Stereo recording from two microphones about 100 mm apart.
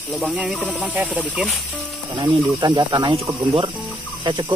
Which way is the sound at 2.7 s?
45° right (ahead or behind).